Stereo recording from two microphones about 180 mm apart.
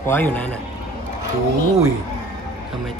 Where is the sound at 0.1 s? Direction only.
10° left (ahead or behind).